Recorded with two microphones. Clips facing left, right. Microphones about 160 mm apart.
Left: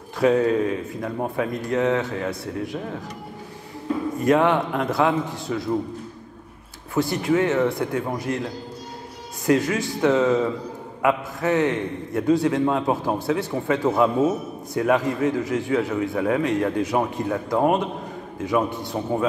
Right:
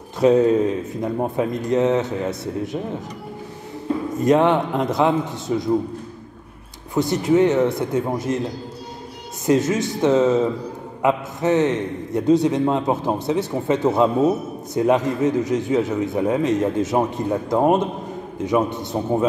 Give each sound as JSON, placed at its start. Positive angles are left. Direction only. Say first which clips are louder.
{"t": 0.2, "sound": "a man's voice", "louder": "right 4 dB", "side_deg": -20}
{"t": 4.2, "sound": "a man's voice", "louder": "right 3 dB", "side_deg": -20}
{"t": 6.9, "sound": "a man's voice", "louder": "right 3 dB", "side_deg": -20}
{"t": 9.5, "sound": "a man's voice", "louder": "right 2 dB", "side_deg": -20}